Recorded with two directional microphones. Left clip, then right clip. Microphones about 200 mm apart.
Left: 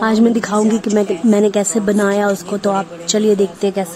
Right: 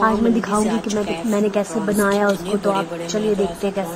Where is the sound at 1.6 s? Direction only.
25° left (ahead or behind).